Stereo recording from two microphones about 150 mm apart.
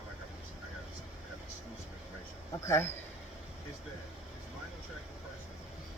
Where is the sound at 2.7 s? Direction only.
15° left (ahead or behind).